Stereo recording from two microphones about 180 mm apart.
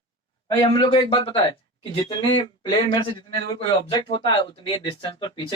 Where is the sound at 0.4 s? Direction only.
25° left (ahead or behind).